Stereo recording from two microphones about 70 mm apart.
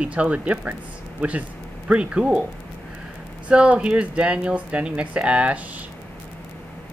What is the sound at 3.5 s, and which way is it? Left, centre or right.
Speech, centre.